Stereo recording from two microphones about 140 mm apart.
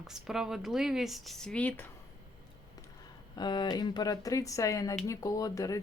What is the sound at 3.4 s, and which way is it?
Speech, 30° left (ahead or behind).